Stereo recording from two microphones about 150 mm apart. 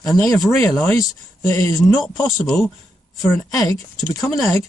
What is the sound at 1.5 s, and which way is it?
Speech, 20° left (ahead or behind).